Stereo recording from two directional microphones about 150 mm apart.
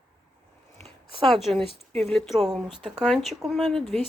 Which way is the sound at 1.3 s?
Centre (ahead or behind).